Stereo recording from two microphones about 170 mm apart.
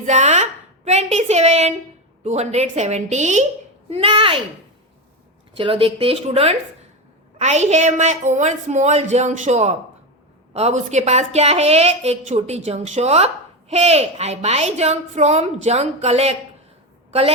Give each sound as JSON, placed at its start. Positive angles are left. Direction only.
{"t": 0.0, "sound": "a sound", "side_deg": -45}
{"t": 0.9, "sound": "a woman's voice", "side_deg": -40}
{"t": 5.5, "sound": "a woman's voice", "side_deg": -30}